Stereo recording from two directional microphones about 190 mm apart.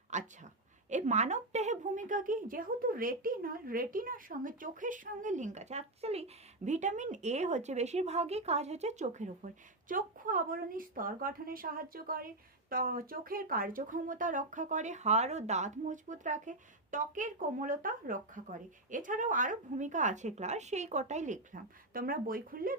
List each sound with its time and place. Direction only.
0.1 s a woman's voice: 40° right (ahead or behind)